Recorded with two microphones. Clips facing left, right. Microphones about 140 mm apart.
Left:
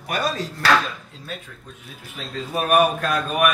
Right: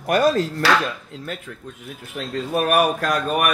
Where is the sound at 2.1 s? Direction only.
60° right (ahead or behind).